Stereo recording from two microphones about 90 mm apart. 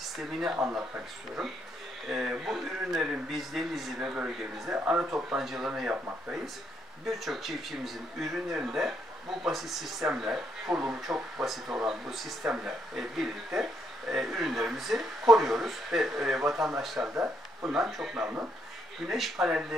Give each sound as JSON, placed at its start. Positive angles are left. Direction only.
{"t": 0.3, "sound": "speech", "side_deg": -5}
{"t": 18.2, "sound": "speech", "side_deg": -20}
{"t": 19.0, "sound": "speech", "side_deg": 0}